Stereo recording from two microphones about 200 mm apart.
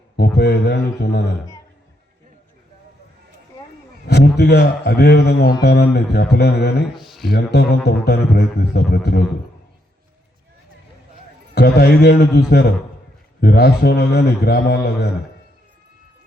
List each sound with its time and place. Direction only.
0.2 s a man's voice: 55° left (ahead or behind)
4.0 s a man's voice: 55° left (ahead or behind)
6.9 s speech: centre (ahead or behind)
7.3 s a man's voice: 55° left (ahead or behind)
11.5 s a man's voice: 55° left (ahead or behind)